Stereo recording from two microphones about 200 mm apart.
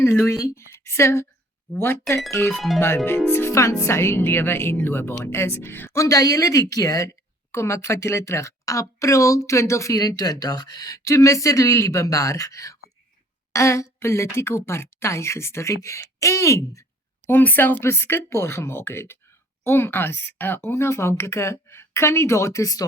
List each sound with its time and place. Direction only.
0.0 s speech: 15° left (ahead or behind)
2.6 s speech: centre (ahead or behind)
3.1 s speech: 10° left (ahead or behind)